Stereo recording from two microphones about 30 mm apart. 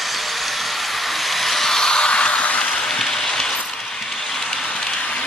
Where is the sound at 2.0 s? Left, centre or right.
Left.